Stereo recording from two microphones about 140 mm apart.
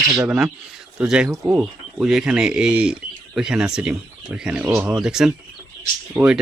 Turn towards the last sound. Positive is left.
turn(degrees=-15)  # may be behind; listen again after turning